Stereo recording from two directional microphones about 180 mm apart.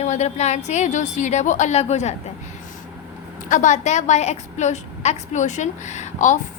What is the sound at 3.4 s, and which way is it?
Speech, 45° left (ahead or behind).